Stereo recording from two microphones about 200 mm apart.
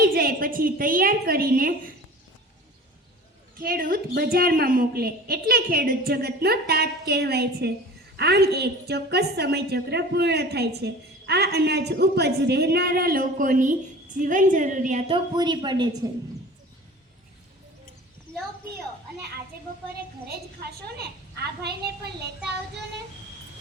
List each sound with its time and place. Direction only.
0.0 s a woman's voice: 50° right (ahead or behind)
3.6 s a woman's voice: 45° right (ahead or behind); by 16.0 s 20° right (ahead or behind)
20.3 s a woman's voice: 50° right (ahead or behind)